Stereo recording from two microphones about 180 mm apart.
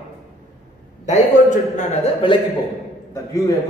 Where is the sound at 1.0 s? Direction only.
45° left (ahead or behind).